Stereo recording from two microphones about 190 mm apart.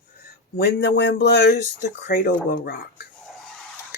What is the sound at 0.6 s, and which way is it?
Speech, 65° left (ahead or behind).